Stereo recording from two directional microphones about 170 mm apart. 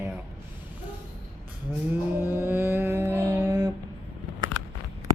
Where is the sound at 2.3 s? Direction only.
10° right (ahead or behind).